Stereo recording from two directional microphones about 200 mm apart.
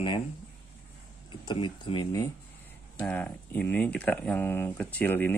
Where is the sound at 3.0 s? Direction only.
10° left (ahead or behind).